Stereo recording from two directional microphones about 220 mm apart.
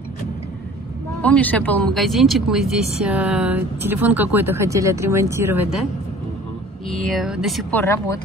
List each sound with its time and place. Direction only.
1.2 s speech: 5° left (ahead or behind)
6.9 s speech: centre (ahead or behind)
7.8 s speech: 15° left (ahead or behind)